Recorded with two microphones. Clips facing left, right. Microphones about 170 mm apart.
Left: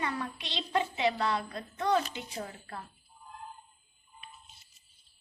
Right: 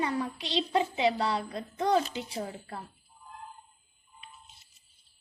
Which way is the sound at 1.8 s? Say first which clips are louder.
Right 2 dB; 35° right (ahead or behind).